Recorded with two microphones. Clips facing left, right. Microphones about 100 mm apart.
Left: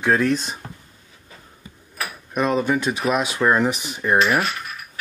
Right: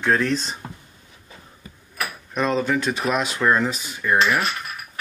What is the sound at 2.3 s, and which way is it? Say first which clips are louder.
Speech: left 1 dB; 10° left (ahead or behind).